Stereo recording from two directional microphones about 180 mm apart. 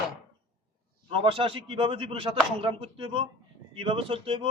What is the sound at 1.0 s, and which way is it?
Speech, 30° right (ahead or behind).